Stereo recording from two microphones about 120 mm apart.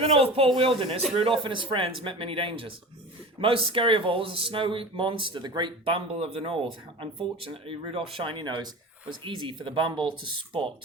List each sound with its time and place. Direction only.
0.0 s speech: 55° right (ahead or behind)